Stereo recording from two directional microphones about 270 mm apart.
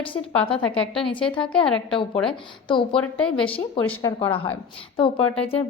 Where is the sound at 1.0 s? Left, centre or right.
Centre.